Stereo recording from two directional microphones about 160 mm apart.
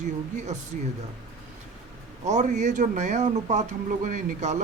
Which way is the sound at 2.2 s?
50° right (ahead or behind).